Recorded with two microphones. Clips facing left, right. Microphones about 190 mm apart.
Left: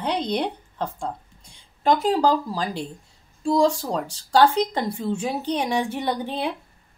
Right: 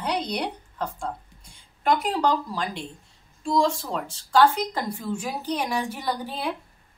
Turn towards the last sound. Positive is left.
turn(degrees=25)  # may be behind; listen again after turning